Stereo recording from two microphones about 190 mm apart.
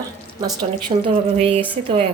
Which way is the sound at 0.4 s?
25° right (ahead or behind).